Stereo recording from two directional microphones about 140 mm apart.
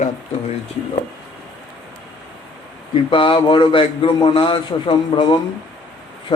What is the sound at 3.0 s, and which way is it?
Speech, 35° left (ahead or behind).